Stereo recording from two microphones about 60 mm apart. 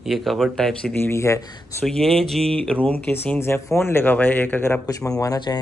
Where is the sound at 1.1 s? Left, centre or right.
Left.